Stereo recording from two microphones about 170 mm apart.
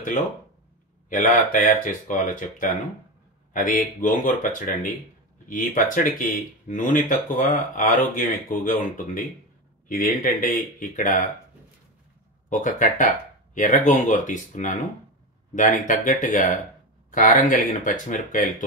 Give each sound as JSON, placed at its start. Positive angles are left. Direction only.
{"t": 1.0, "sound": "speech", "side_deg": 50}
{"t": 12.4, "sound": "speech", "side_deg": 50}